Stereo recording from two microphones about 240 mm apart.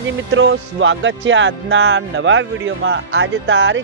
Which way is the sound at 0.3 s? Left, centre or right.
Right.